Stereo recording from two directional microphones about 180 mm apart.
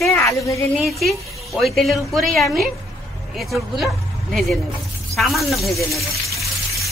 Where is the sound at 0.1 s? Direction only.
15° left (ahead or behind).